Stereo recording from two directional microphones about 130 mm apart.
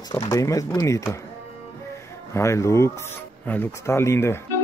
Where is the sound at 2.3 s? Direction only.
20° left (ahead or behind).